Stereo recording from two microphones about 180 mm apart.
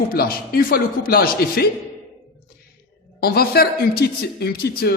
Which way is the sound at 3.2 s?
60° left (ahead or behind).